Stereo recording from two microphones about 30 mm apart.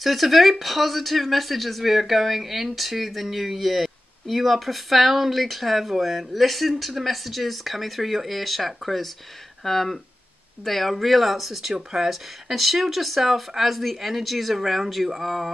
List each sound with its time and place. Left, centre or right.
0.0 s speech: centre
9.7 s speech: centre